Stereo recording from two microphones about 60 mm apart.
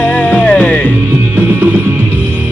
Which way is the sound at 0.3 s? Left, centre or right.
Centre.